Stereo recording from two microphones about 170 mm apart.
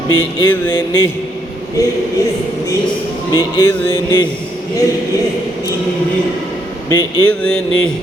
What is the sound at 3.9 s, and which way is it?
Mantra, 25° left (ahead or behind).